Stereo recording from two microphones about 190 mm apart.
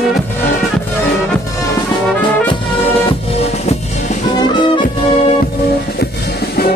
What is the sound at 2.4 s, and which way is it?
Brass instrument, 30° left (ahead or behind).